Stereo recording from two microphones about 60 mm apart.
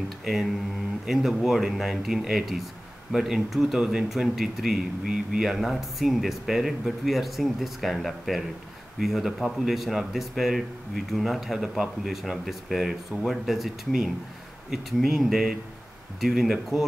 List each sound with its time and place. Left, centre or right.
0.2 s speech: centre